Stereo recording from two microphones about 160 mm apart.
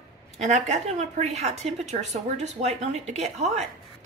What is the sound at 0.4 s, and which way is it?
A woman's voice, 45° right (ahead or behind).